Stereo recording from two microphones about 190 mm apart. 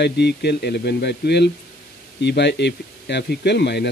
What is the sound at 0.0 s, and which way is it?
Speech, 60° left (ahead or behind).